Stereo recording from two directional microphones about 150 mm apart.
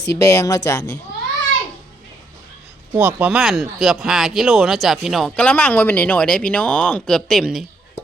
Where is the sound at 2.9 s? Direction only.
10° right (ahead or behind).